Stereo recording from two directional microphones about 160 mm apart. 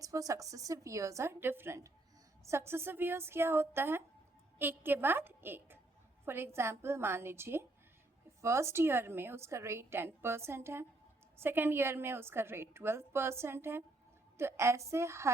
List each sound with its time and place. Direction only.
0.0 s a woman's voice: 20° right (ahead or behind)